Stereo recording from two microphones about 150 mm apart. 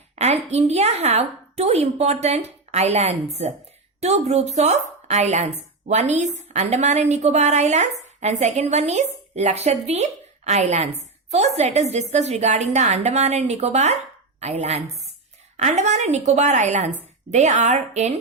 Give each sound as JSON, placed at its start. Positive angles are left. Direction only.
{"t": 0.2, "sound": "a woman's voice", "side_deg": -45}